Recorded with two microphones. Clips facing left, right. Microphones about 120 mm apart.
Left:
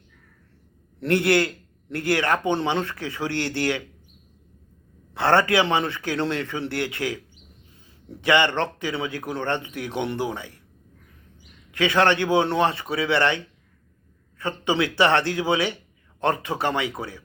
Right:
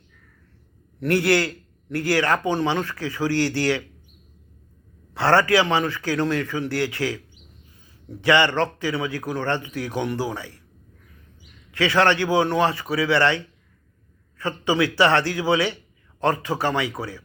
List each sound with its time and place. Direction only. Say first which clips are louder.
0.9 s speech: even; 25° left (ahead or behind)
5.1 s speech: right 1 dB; 20° left (ahead or behind)
8.2 s speech: right 2 dB; 20° left (ahead or behind)
11.7 s speech: right 1 dB; 20° left (ahead or behind)